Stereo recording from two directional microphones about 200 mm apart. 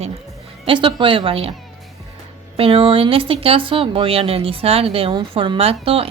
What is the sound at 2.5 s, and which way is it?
Speech, 25° right (ahead or behind).